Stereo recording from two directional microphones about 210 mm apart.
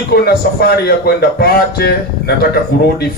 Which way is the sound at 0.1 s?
50° left (ahead or behind).